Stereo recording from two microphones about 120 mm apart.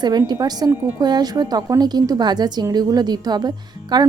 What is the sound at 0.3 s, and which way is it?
Speech, 35° right (ahead or behind).